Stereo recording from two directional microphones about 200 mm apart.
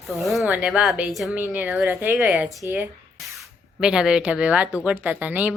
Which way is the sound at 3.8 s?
5° right (ahead or behind).